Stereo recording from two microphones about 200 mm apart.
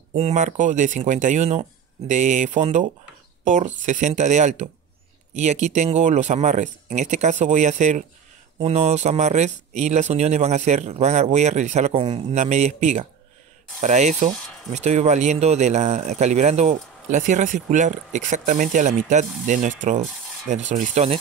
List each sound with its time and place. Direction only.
0.1 s speech: 35° right (ahead or behind)